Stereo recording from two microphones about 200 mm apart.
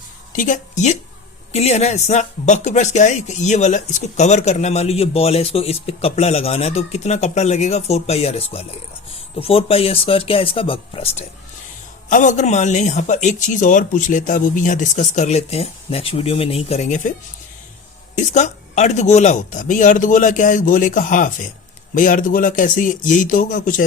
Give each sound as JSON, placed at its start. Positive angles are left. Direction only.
{"t": 0.3, "sound": "speech", "side_deg": 40}
{"t": 18.2, "sound": "speech", "side_deg": 35}